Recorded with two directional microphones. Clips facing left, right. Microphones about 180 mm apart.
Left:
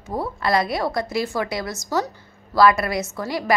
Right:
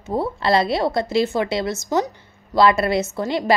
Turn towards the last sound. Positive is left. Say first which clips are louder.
# right 4 dB
turn(degrees=-25)  # may be behind; listen again after turning